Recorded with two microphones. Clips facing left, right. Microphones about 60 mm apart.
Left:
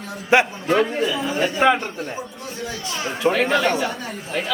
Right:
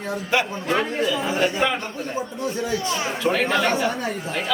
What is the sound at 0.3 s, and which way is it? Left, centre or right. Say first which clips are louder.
A man's voice: left 6 dB; centre.